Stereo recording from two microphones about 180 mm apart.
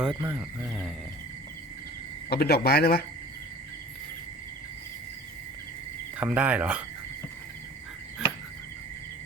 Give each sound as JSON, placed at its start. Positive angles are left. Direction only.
{"t": 0.0, "sound": "speech", "side_deg": -5}
{"t": 2.3, "sound": "speech", "side_deg": 60}
{"t": 6.1, "sound": "speech", "side_deg": -10}